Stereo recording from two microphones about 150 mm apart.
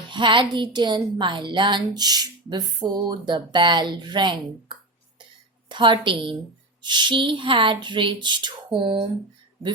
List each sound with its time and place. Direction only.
0.1 s a woman's voice: 30° right (ahead or behind)